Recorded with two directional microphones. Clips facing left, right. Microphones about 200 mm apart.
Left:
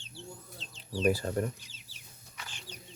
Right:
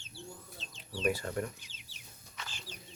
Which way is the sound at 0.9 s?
35° left (ahead or behind).